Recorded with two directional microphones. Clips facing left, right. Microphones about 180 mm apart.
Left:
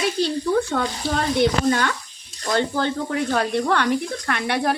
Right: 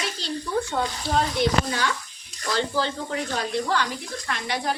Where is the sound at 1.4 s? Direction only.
55° left (ahead or behind).